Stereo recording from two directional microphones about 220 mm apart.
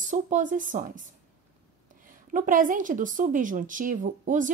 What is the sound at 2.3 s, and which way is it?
A woman's voice, 35° right (ahead or behind).